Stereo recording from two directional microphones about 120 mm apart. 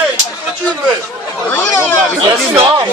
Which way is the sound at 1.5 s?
20° left (ahead or behind).